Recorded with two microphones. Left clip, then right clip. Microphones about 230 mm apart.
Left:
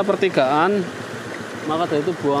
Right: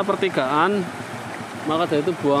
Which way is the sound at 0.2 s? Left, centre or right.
Centre.